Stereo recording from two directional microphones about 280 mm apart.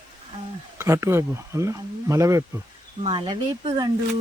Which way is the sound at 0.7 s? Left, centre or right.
Centre.